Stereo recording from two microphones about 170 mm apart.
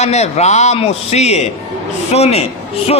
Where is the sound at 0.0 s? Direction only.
40° left (ahead or behind).